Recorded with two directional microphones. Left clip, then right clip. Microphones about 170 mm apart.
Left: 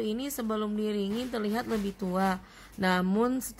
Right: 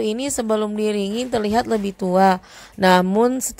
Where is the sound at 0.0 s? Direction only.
35° right (ahead or behind).